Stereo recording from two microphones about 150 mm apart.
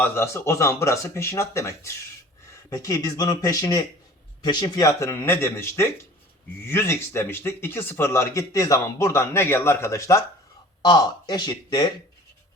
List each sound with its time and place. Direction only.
0.0 s a man's voice: 15° left (ahead or behind)